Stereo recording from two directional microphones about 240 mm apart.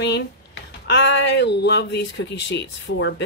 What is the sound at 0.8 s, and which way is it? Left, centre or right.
A woman's voice, left.